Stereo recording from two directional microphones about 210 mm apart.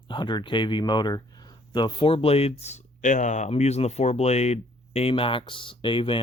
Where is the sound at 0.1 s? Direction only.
20° left (ahead or behind).